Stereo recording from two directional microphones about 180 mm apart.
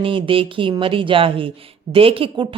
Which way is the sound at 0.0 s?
30° right (ahead or behind).